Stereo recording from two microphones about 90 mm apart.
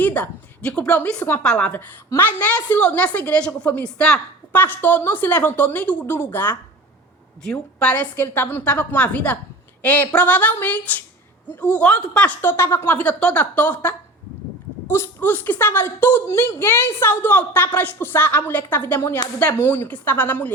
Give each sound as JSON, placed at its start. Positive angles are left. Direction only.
{"t": 0.0, "sound": "a woman's voice", "side_deg": 15}